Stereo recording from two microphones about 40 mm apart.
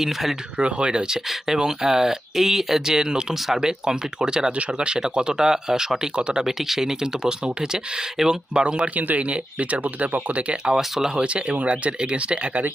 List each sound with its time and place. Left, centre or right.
0.0 s speech: centre
0.5 s speech: right
3.3 s speech: centre
3.6 s speech: centre
6.1 s speech: right
6.4 s speech: centre
8.6 s speech: right
9.0 s speech: right
10.3 s speech: right
10.8 s speech: centre
11.1 s speech: right